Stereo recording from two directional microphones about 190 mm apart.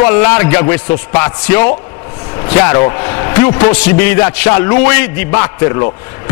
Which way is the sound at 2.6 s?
15° left (ahead or behind).